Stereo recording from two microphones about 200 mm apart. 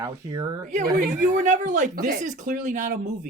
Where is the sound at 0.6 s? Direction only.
40° right (ahead or behind).